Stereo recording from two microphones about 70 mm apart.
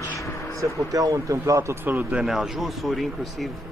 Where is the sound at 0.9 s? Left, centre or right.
Right.